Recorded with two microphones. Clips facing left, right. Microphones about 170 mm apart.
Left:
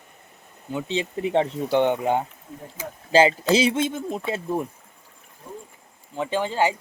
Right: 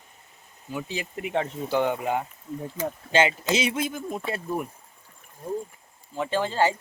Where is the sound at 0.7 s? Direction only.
25° left (ahead or behind).